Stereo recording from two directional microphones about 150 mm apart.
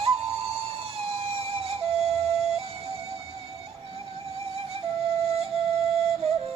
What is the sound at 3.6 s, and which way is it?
Music, 40° right (ahead or behind).